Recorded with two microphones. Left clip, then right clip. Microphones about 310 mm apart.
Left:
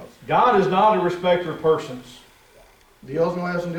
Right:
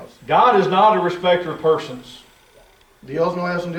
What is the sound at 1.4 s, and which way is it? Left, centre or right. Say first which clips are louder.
Speech: right 2 dB; centre.